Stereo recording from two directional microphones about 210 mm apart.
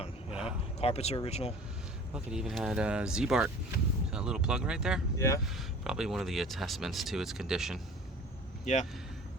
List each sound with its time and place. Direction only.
0.4 s speech: 30° left (ahead or behind)
2.1 s speech: 5° right (ahead or behind)
5.1 s speech: 15° left (ahead or behind)
5.5 s speech: centre (ahead or behind)
8.6 s speech: 35° left (ahead or behind)